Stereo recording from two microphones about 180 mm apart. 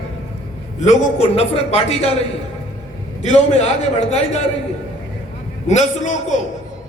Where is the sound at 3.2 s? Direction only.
40° left (ahead or behind).